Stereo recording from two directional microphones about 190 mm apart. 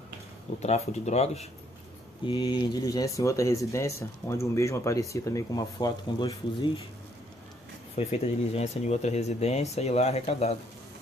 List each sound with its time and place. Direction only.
0.6 s speech: 35° left (ahead or behind)
2.2 s speech: 25° left (ahead or behind)
8.0 s speech: 35° left (ahead or behind)